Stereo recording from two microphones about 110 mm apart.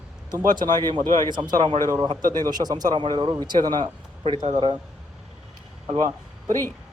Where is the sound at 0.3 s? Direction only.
40° right (ahead or behind).